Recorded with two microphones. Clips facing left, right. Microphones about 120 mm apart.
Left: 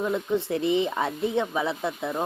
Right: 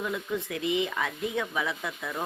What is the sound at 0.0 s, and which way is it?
Speech, 30° left (ahead or behind).